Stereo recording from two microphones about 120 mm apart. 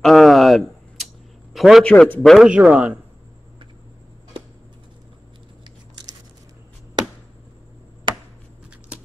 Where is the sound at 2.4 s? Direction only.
10° right (ahead or behind).